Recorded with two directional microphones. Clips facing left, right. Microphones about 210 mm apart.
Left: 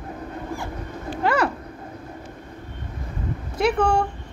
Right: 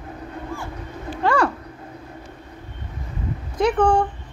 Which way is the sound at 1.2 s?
20° left (ahead or behind).